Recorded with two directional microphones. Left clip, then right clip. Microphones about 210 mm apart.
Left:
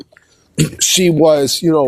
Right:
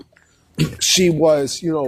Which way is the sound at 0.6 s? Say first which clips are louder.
Left 2 dB; 45° left (ahead or behind).